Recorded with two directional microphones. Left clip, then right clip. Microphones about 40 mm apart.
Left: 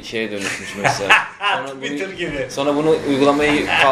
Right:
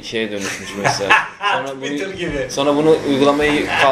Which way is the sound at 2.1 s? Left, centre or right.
Centre.